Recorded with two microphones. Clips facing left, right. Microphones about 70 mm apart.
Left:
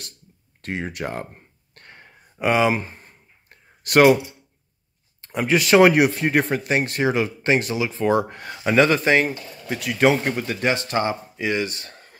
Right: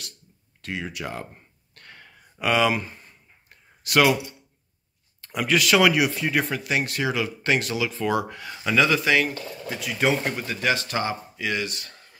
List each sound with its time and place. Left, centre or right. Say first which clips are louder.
0.6 s a sound: left 4 dB; left
5.2 s speech: left 2 dB; left
9.7 s speech: left 6 dB; left
10.2 s speech: left 3 dB; left